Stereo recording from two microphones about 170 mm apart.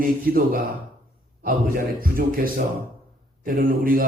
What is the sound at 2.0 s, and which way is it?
A man's voice, 60° right (ahead or behind).